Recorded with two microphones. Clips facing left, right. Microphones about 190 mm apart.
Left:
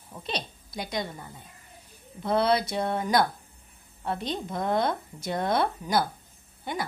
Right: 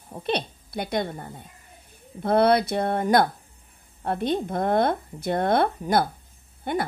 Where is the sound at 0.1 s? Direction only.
60° right (ahead or behind).